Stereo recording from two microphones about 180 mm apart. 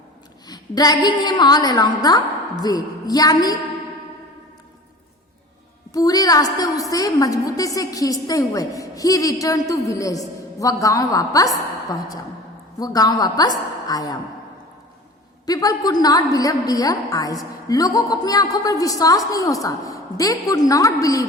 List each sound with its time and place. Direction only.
0.4 s a woman's voice: 20° left (ahead or behind)
5.9 s a woman's voice: 20° left (ahead or behind)
15.4 s a woman's voice: 20° left (ahead or behind)